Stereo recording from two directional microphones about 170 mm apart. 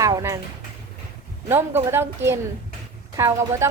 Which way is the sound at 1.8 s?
15° right (ahead or behind).